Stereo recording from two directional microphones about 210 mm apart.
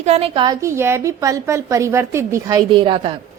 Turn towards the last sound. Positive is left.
turn(degrees=-25)  # may be behind; listen again after turning